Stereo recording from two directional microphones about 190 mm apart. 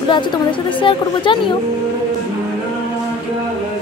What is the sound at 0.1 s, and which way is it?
Speech, 25° left (ahead or behind).